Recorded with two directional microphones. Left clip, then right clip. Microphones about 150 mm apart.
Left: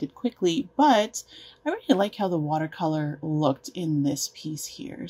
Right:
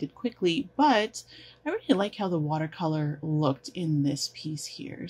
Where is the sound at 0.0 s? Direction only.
35° left (ahead or behind).